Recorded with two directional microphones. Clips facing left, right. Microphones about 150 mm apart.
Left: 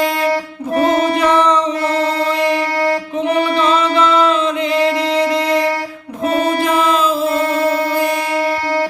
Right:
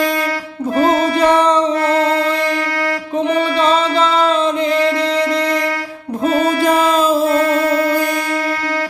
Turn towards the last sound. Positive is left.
turn(degrees=-40)  # may be behind; listen again after turning